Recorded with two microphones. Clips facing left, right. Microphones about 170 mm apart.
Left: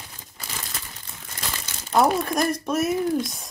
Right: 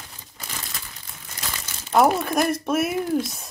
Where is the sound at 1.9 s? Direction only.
5° right (ahead or behind).